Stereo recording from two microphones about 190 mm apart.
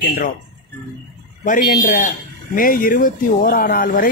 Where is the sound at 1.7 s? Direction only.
45° left (ahead or behind).